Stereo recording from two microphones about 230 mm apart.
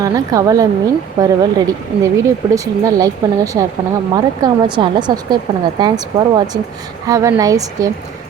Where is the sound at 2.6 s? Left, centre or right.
Centre.